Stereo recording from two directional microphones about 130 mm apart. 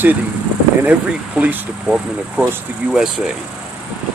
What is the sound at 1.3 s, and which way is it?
Speech, 10° right (ahead or behind).